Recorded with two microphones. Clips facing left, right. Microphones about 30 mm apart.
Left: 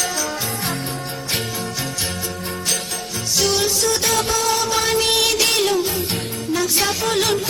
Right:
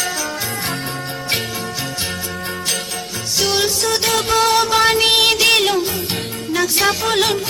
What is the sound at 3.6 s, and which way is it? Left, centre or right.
Music, right.